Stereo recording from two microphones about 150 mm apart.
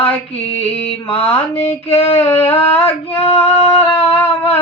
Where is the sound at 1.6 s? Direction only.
40° left (ahead or behind).